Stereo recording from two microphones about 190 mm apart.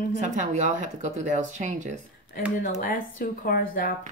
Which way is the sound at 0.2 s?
40° right (ahead or behind).